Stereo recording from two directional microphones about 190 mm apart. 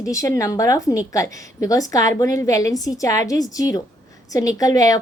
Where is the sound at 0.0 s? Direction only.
15° left (ahead or behind).